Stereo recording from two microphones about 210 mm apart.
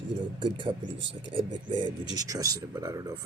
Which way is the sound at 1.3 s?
25° right (ahead or behind).